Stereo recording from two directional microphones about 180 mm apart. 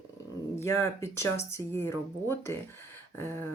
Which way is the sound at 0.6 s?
15° left (ahead or behind).